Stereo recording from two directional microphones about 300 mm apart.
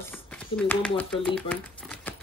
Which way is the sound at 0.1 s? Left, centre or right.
Centre.